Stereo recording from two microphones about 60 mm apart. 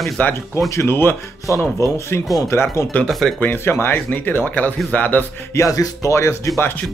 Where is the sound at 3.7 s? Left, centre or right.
Left.